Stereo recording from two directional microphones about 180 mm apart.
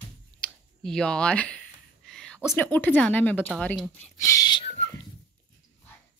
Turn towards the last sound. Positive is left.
turn(degrees=20)  # may be behind; listen again after turning